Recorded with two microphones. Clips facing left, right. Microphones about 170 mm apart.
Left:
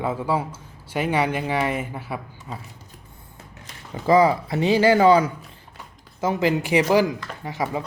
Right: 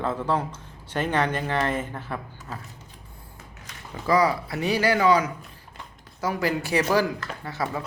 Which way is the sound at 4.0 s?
25° left (ahead or behind).